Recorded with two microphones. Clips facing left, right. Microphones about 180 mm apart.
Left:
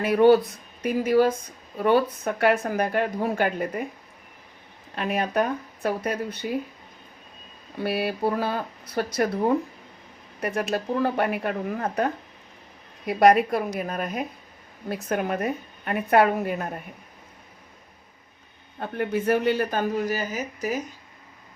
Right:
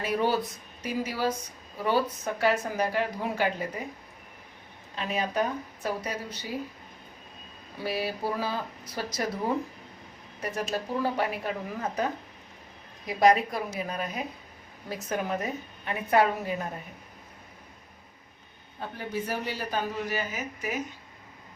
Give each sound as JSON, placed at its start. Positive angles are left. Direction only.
{"t": 0.0, "sound": "speech", "side_deg": 60}
{"t": 4.9, "sound": "speech", "side_deg": 60}
{"t": 7.8, "sound": "speech", "side_deg": 60}
{"t": 10.4, "sound": "speech", "side_deg": 65}
{"t": 18.8, "sound": "speech", "side_deg": 60}